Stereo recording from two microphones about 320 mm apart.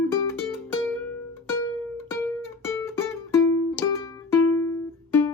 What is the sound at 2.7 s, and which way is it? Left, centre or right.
Music, centre.